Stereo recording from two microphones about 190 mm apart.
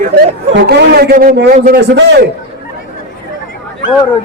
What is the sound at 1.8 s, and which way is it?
Speech, 65° right (ahead or behind).